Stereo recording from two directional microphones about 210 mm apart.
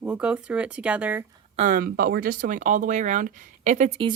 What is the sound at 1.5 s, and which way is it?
Speech, 40° right (ahead or behind).